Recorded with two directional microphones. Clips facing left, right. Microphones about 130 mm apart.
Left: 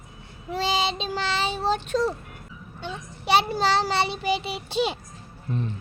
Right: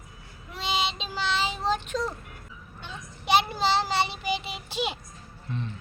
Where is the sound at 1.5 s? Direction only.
35° left (ahead or behind).